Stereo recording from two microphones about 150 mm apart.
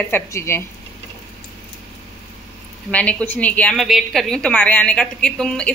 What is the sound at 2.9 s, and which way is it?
A woman's voice, 10° left (ahead or behind).